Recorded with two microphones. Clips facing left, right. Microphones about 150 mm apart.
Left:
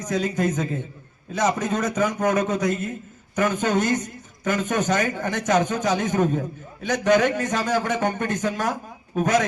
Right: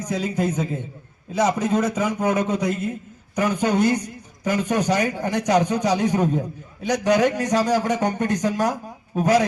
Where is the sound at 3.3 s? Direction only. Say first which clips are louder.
Right 1 dB; 15° right (ahead or behind).